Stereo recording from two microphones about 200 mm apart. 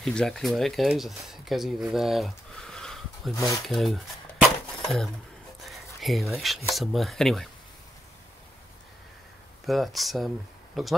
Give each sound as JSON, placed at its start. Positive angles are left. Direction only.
{"t": 0.0, "sound": "speech", "side_deg": 5}
{"t": 3.3, "sound": "speech", "side_deg": 15}
{"t": 3.6, "sound": "dishes", "side_deg": 0}
{"t": 5.7, "sound": "speech", "side_deg": 0}
{"t": 9.7, "sound": "speech", "side_deg": 0}